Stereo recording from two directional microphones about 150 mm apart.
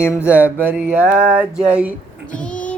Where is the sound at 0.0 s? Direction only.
15° left (ahead or behind).